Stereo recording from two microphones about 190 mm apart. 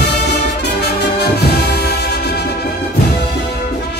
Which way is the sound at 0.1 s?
60° left (ahead or behind).